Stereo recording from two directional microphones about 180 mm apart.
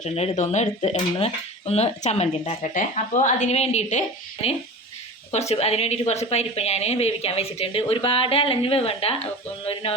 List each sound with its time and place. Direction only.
0.0 s speech: 40° left (ahead or behind)